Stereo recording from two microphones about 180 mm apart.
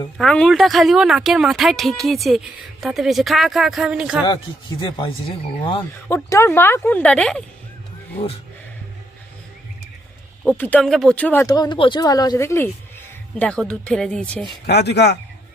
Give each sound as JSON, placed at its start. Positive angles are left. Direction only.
{"t": 0.2, "sound": "speech", "side_deg": 5}
{"t": 4.8, "sound": "speech", "side_deg": 25}
{"t": 6.1, "sound": "speech", "side_deg": 15}
{"t": 10.4, "sound": "speech", "side_deg": 5}
{"t": 13.4, "sound": "speech", "side_deg": 5}
{"t": 14.7, "sound": "speech", "side_deg": 65}